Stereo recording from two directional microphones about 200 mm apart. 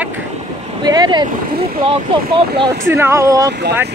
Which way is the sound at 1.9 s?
25° right (ahead or behind).